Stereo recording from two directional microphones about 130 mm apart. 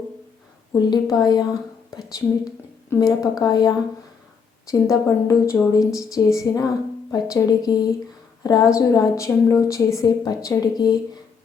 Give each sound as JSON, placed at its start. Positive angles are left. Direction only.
{"t": 0.8, "sound": "a woman's voice", "side_deg": 30}